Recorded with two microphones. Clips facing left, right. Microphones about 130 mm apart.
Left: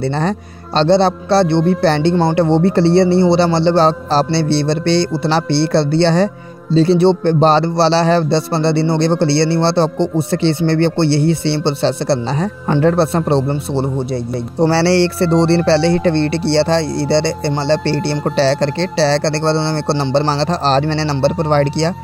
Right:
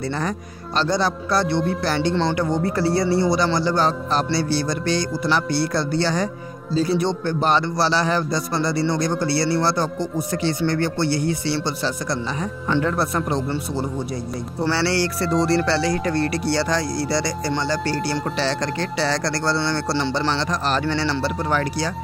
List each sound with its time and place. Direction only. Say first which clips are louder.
0.0 s a man's voice: left 7 dB; 30° left (ahead or behind)
12.8 s a man's voice: left 9 dB; 30° left (ahead or behind)